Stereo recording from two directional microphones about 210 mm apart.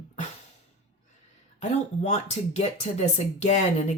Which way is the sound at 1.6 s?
35° left (ahead or behind).